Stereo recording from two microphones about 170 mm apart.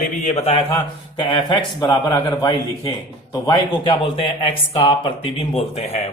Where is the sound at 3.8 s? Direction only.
30° left (ahead or behind).